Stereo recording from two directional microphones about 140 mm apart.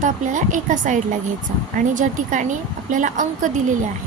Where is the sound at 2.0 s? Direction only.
65° right (ahead or behind).